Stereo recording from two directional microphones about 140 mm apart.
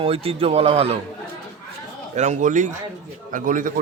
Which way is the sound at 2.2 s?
60° right (ahead or behind).